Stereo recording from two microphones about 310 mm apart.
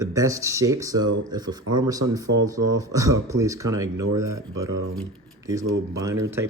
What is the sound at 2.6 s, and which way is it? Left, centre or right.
Speech, right.